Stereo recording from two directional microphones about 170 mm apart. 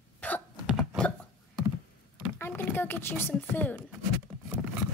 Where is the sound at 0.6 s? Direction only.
5° right (ahead or behind).